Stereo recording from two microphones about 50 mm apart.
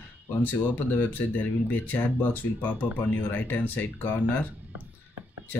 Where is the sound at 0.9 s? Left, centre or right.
Left.